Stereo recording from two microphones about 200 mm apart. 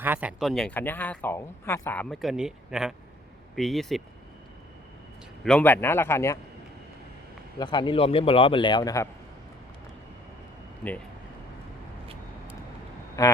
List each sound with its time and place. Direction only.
0.0 s speech: 10° right (ahead or behind)
5.4 s a man's voice: 5° left (ahead or behind)
7.6 s a man's voice: 20° left (ahead or behind)
13.2 s a man's voice: 15° left (ahead or behind)